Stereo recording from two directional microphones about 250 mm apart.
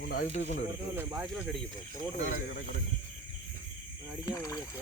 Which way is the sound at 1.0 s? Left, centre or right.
Centre.